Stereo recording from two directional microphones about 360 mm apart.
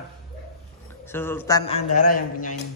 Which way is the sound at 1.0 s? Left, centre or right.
Centre.